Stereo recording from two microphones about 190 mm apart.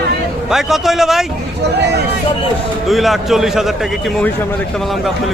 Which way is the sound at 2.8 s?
Centre (ahead or behind).